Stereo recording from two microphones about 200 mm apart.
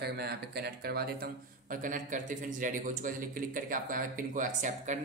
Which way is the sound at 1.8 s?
40° right (ahead or behind).